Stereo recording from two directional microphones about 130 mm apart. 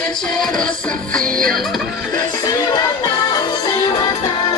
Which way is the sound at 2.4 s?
30° left (ahead or behind).